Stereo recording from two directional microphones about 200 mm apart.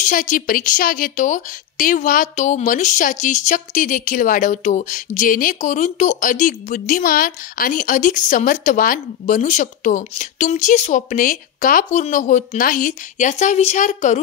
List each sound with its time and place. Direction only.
0.0 s a woman's voice: 40° left (ahead or behind)